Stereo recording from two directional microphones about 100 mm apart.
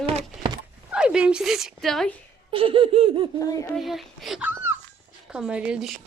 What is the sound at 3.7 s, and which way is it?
Speech, centre (ahead or behind).